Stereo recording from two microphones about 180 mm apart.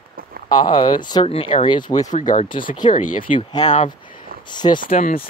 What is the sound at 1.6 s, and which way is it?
Speech, 25° left (ahead or behind).